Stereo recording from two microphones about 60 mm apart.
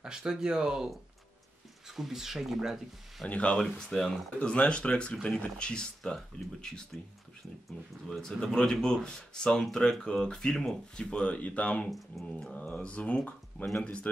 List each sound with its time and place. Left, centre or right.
0.0 s speech: centre
1.9 s speech: centre
3.3 s speech: centre
3.6 s speech: centre
8.1 s speech: centre
11.9 s speech: centre
12.5 s speech: left